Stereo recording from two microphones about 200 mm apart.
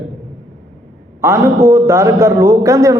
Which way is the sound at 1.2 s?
15° right (ahead or behind).